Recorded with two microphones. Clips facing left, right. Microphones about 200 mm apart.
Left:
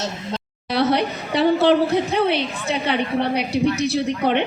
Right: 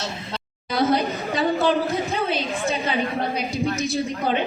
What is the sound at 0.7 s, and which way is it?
A woman's voice, 70° left (ahead or behind).